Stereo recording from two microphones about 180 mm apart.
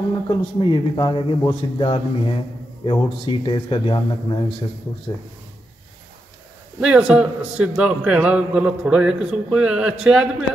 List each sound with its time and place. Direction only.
0.3 s a man's voice: 25° left (ahead or behind)
6.8 s a man's voice: 5° right (ahead or behind)